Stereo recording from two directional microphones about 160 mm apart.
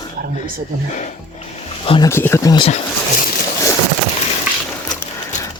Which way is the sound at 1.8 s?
35° left (ahead or behind).